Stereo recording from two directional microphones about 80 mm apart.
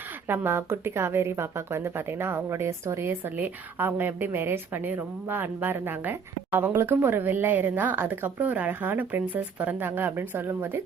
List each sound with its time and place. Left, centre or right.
0.3 s a woman's voice: right